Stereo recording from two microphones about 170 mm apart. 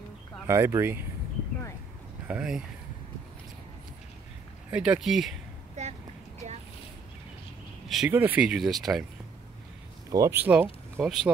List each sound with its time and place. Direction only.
0.5 s speech: 15° right (ahead or behind)
2.2 s speech: 5° right (ahead or behind)
4.6 s speech: 5° right (ahead or behind)
5.8 s a sound: 40° right (ahead or behind)
8.1 s speech: 10° right (ahead or behind)
10.1 s speech: 15° right (ahead or behind)